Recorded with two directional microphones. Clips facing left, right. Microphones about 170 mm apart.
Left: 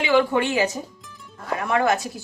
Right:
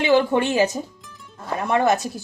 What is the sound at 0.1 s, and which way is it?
Speech, 25° right (ahead or behind).